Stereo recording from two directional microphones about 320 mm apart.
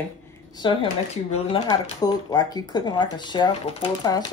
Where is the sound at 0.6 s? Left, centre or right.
Centre.